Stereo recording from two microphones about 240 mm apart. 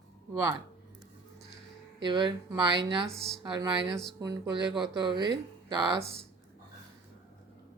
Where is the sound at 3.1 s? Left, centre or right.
Centre.